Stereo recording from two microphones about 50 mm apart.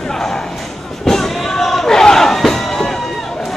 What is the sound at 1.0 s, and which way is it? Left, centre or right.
Slam, centre.